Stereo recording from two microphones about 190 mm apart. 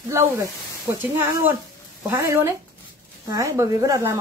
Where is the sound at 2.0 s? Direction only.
15° right (ahead or behind).